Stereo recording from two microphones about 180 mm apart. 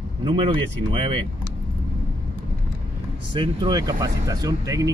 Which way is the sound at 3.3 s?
25° right (ahead or behind).